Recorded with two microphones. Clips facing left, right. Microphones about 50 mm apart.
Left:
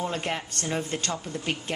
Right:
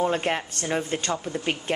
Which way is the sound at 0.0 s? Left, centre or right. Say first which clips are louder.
Right 5 dB; right.